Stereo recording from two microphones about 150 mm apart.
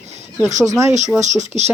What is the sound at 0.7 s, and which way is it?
Speech, 20° right (ahead or behind).